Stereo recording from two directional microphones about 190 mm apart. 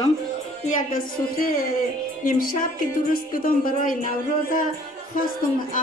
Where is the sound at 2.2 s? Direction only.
45° left (ahead or behind).